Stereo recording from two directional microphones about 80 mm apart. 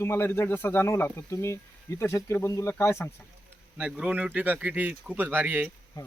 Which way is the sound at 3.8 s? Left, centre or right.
Centre.